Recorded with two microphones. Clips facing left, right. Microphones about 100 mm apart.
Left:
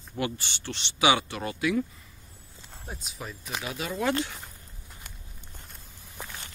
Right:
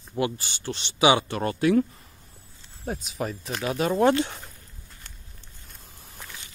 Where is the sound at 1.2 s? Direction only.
45° right (ahead or behind).